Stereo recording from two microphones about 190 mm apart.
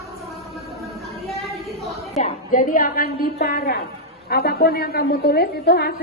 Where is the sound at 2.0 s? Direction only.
35° left (ahead or behind).